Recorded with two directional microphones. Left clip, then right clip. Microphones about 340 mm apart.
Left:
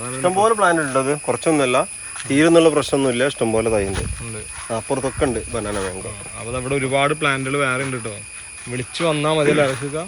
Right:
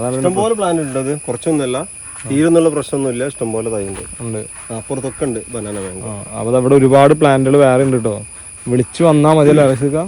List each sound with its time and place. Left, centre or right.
0.0 s speech: centre
3.5 s speech: left
5.2 s speech: centre
6.4 s speech: centre